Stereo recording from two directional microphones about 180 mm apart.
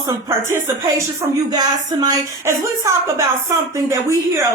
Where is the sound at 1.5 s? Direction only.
20° right (ahead or behind).